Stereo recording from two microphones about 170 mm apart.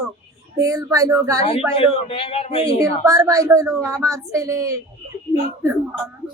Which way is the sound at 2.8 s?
20° right (ahead or behind).